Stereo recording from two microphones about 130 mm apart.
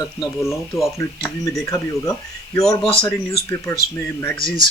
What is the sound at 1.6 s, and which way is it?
Speech, 25° left (ahead or behind).